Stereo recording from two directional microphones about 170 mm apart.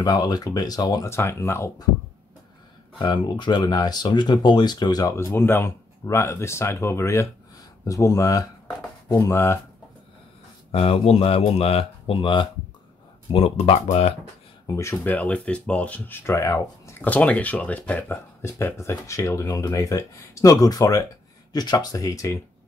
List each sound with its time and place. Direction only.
0.0 s speech: 25° left (ahead or behind)
3.0 s speech: 25° left (ahead or behind)
10.7 s speech: 35° left (ahead or behind)
14.7 s speech: 15° left (ahead or behind)